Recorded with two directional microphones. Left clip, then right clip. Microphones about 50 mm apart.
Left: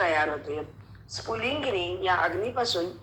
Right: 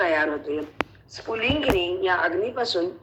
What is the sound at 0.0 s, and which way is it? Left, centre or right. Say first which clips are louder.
Speech: right 3 dB; right.